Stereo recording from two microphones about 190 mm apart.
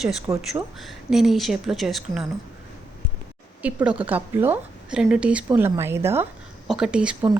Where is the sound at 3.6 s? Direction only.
10° right (ahead or behind).